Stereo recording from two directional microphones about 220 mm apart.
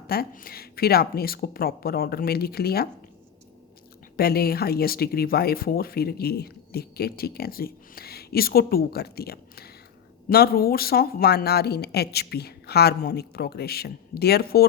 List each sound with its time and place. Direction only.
0.1 s speech: 45° left (ahead or behind)
4.2 s speech: 45° left (ahead or behind)